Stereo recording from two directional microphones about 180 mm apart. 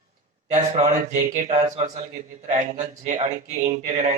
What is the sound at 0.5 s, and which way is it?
Speech, 45° right (ahead or behind).